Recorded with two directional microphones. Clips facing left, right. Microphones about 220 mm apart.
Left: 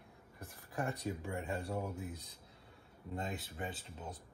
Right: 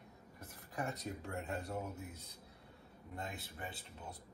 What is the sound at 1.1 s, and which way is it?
Speech, 10° left (ahead or behind).